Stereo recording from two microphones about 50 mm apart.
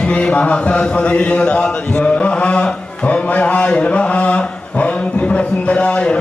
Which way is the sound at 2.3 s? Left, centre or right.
Left.